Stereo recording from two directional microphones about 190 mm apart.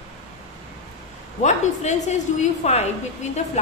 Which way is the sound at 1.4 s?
35° left (ahead or behind).